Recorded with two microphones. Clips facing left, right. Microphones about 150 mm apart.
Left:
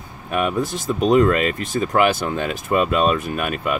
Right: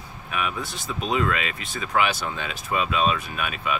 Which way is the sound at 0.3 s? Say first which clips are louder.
Left 8 dB; 45° left (ahead or behind).